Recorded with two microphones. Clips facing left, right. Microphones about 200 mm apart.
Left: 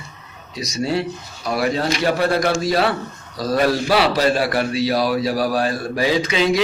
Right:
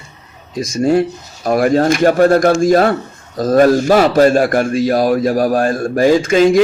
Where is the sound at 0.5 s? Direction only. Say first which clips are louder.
Right 8 dB; 50° right (ahead or behind).